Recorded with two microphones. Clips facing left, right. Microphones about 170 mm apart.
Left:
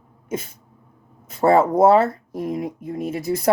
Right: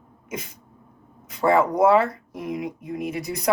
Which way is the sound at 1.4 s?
30° left (ahead or behind).